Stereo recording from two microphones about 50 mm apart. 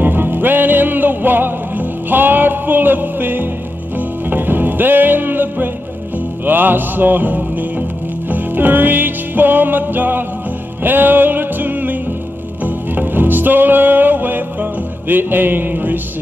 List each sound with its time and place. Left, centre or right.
0.0 s music: right